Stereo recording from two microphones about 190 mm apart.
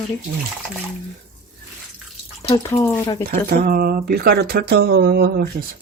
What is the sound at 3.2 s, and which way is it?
Speech, 50° right (ahead or behind).